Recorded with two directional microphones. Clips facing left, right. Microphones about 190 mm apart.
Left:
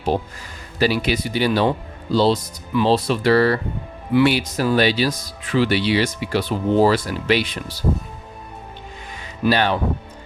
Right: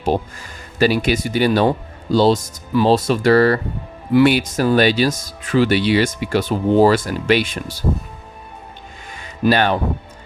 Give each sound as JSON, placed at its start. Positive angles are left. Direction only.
{"t": 0.8, "sound": "speech", "side_deg": -50}
{"t": 9.4, "sound": "speech", "side_deg": -50}